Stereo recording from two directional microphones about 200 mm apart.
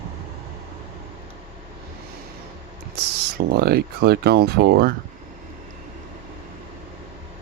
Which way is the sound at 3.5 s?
50° right (ahead or behind).